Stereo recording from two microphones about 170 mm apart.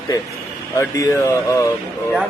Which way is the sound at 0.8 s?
15° left (ahead or behind).